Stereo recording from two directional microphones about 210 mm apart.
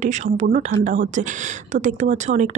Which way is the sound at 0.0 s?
35° right (ahead or behind).